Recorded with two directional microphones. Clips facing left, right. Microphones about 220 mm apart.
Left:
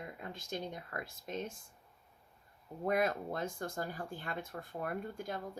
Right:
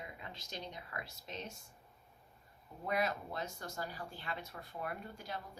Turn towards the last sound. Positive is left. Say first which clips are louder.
# left 5 dB
turn(degrees=50)  # may be behind; listen again after turning